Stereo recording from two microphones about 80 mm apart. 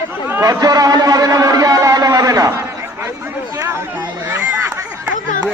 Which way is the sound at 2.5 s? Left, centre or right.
Right.